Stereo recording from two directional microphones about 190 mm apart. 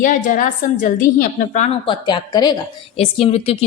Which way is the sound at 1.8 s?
25° left (ahead or behind).